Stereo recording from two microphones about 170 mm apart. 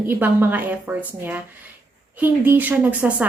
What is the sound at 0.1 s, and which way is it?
Speech, 10° right (ahead or behind).